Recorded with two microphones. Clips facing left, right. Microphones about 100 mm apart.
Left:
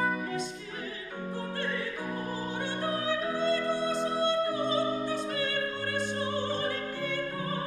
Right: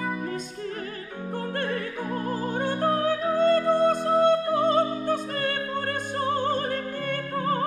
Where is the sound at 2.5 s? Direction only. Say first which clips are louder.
Right 9 dB; 45° right (ahead or behind).